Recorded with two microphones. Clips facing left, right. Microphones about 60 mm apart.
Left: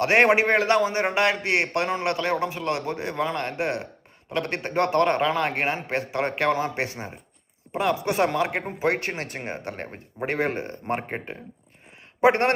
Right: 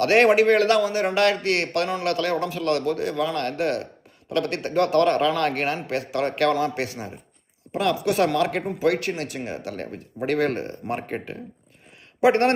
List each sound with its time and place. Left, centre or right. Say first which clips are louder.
0.0 s a man's voice: right 2 dB; left